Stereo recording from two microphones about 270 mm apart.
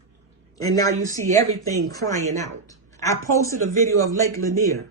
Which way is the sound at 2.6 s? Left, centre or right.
Centre.